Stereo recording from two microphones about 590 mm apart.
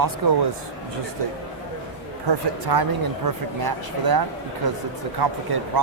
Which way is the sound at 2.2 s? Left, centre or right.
Right.